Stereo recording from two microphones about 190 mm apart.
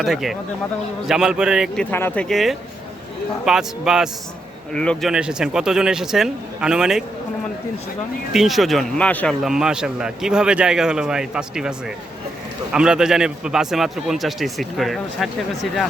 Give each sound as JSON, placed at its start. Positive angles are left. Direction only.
{"t": 0.0, "sound": "speech", "side_deg": 0}
{"t": 8.3, "sound": "speech", "side_deg": 0}
{"t": 12.7, "sound": "speech", "side_deg": -5}